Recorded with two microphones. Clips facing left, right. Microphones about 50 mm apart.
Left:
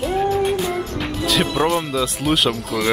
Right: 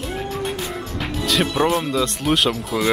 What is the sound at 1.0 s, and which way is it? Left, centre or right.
Speech, centre.